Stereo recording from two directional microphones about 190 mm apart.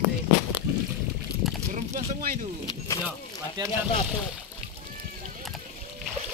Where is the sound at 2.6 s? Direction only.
20° left (ahead or behind).